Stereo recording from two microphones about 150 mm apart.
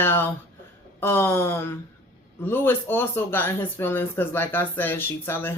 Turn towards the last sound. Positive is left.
turn(degrees=15)  # may be behind; listen again after turning